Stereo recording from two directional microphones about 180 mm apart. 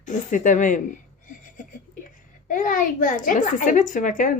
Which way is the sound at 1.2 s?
45° left (ahead or behind).